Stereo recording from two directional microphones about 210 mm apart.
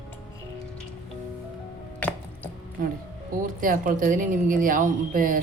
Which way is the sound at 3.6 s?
40° right (ahead or behind).